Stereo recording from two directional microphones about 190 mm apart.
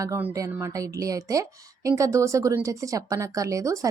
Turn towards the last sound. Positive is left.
turn(degrees=-15)  # may be behind; listen again after turning